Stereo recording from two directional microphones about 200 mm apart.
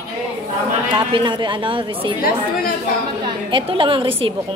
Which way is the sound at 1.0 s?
25° right (ahead or behind).